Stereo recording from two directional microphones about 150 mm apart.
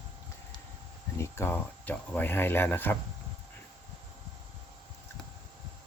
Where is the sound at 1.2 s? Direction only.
15° left (ahead or behind).